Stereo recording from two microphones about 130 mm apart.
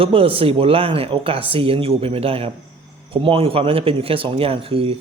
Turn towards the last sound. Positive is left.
turn(degrees=-45)  # may be behind; listen again after turning